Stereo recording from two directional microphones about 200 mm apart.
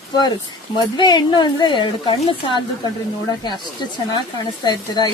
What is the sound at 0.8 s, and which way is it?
A woman's voice, 20° left (ahead or behind).